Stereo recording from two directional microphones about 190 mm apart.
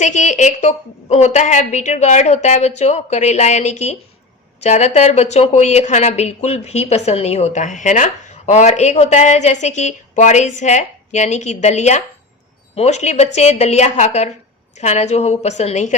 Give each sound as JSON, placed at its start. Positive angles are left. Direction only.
{"t": 0.0, "sound": "speech", "side_deg": 40}